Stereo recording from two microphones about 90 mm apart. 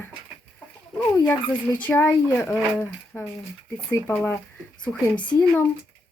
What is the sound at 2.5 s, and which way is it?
Speech, 20° left (ahead or behind).